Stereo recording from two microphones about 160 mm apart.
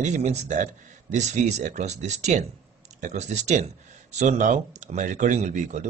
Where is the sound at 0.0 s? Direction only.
45° right (ahead or behind).